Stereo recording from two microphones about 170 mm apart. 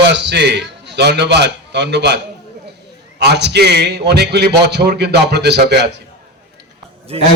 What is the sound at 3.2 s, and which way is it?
A man's voice, 85° right.